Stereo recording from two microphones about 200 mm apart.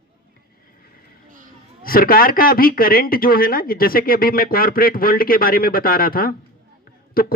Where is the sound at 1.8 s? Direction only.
45° left (ahead or behind).